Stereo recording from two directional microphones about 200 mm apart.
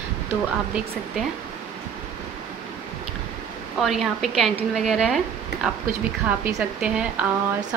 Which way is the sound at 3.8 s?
Centre (ahead or behind).